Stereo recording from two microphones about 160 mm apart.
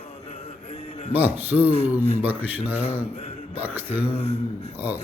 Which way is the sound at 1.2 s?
10° right (ahead or behind).